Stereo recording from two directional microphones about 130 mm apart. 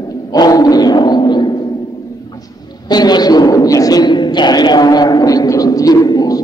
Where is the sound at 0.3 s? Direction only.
30° left (ahead or behind).